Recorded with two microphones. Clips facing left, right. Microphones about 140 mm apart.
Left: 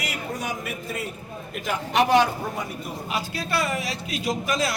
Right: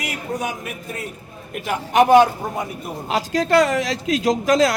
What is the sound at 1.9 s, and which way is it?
Speech, 50° right (ahead or behind).